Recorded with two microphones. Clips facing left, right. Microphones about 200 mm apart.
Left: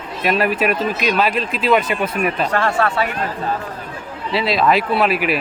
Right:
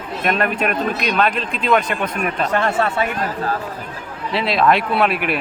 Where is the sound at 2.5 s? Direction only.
20° right (ahead or behind).